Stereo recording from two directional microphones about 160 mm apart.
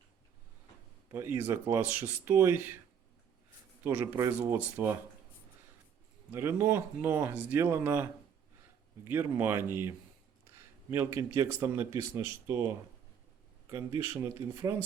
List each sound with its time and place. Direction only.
1.1 s speech: 15° right (ahead or behind)
3.8 s speech: 15° right (ahead or behind)
6.3 s speech: 15° right (ahead or behind)
9.1 s speech: 15° right (ahead or behind)